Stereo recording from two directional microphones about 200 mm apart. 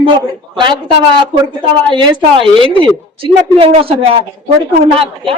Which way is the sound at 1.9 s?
25° right (ahead or behind).